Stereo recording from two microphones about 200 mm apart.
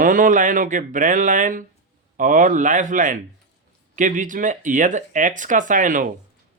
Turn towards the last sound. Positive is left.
turn(degrees=-40)  # may be behind; listen again after turning